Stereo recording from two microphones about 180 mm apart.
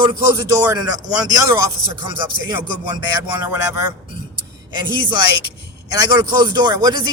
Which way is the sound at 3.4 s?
10° right (ahead or behind).